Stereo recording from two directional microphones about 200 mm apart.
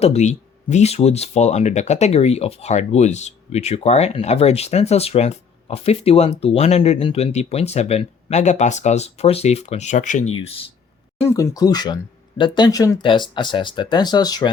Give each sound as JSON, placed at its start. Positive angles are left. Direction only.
{"t": 0.0, "sound": "speech", "side_deg": 35}
{"t": 11.2, "sound": "speech", "side_deg": 15}